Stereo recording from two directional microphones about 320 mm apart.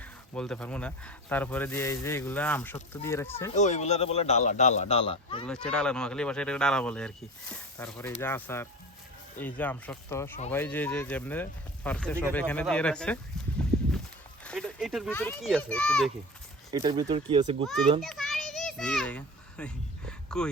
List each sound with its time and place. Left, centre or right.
0.0 s speech: centre
3.5 s speech: left
5.5 s speech: centre
14.4 s speech: centre
16.7 s speech: centre
18.0 s children playing: centre